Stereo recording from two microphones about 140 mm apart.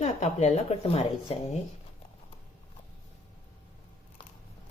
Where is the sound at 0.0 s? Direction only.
50° left (ahead or behind).